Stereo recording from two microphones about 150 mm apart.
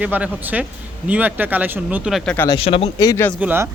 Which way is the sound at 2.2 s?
5° left (ahead or behind).